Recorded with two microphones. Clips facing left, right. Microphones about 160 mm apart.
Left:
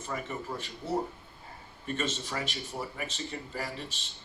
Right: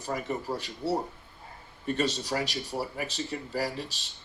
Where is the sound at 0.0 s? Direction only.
35° right (ahead or behind).